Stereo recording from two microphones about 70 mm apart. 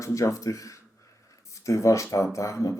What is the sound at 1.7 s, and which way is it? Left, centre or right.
Speech, left.